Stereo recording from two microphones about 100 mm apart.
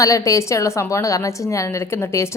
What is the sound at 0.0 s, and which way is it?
A woman's voice, 35° left (ahead or behind).